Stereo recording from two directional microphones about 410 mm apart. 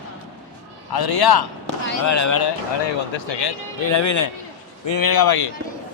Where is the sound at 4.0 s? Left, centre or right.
Left.